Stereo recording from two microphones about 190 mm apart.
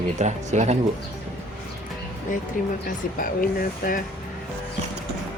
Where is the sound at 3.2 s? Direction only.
45° left (ahead or behind).